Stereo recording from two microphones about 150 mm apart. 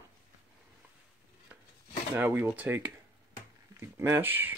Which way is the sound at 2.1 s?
15° right (ahead or behind).